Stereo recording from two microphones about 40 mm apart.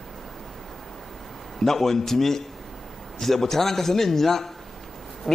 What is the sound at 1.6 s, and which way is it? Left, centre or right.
A man's voice, centre.